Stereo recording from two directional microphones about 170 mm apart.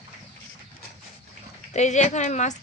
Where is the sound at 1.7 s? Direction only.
45° left (ahead or behind).